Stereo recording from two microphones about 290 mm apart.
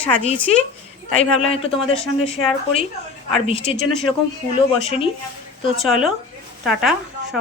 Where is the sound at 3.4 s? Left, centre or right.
Centre.